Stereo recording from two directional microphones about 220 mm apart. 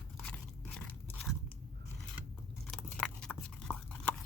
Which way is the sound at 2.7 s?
5° left (ahead or behind).